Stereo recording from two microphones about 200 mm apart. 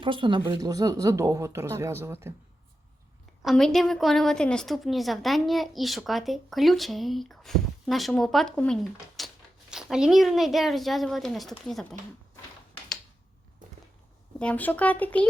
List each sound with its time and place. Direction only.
0.0 s speech: 25° right (ahead or behind)
3.4 s a woman's voice: centre (ahead or behind)
14.3 s speech: 5° left (ahead or behind)